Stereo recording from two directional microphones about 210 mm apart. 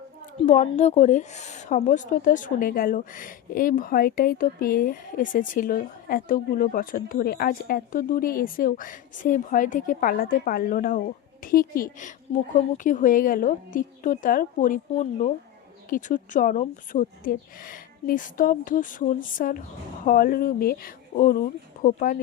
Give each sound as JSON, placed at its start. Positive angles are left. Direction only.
{"t": 0.3, "sound": "a woman's voice", "side_deg": 35}
{"t": 15.9, "sound": "a woman's voice", "side_deg": 40}